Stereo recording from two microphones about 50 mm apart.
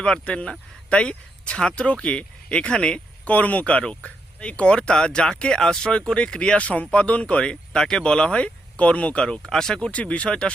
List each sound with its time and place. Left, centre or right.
0.0 s speech: centre
3.2 s speech: left
9.2 s speech: centre
9.9 s speech: left